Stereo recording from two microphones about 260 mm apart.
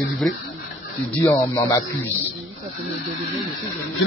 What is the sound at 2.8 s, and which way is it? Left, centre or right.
Speech, centre.